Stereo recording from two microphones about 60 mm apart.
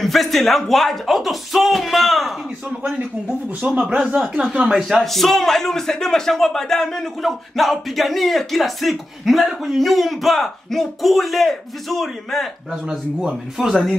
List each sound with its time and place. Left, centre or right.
0.0 s a man's voice: centre
3.6 s speech: centre
4.1 s a man's voice: centre
4.6 s speech: centre
5.0 s a man's voice: centre
12.8 s a man's voice: centre